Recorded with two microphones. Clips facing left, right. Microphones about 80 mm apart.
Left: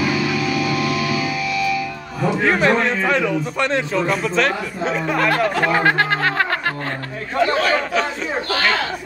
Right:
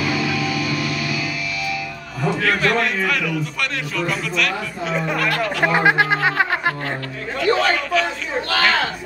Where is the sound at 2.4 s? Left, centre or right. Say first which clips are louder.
Left 3 dB; left.